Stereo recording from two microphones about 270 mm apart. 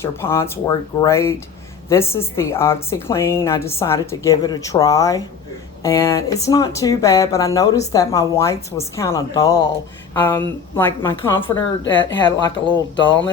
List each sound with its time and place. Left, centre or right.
0.0 s a woman's voice: centre